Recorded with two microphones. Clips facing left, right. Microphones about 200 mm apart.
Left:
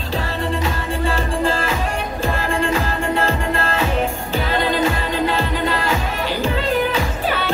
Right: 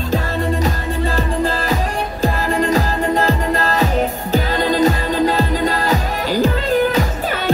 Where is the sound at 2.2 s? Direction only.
40° right (ahead or behind).